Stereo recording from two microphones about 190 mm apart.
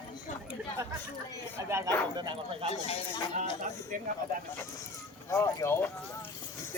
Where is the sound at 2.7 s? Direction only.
30° left (ahead or behind).